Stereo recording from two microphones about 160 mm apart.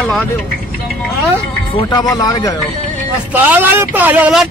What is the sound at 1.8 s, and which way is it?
Speech, 25° left (ahead or behind).